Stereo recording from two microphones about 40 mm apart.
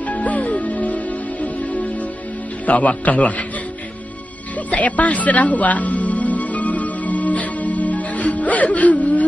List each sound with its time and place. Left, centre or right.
0.1 s music: left
2.6 s a man's voice: left
4.6 s music: left